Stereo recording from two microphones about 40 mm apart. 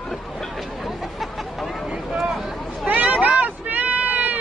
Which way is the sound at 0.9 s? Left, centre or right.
Centre.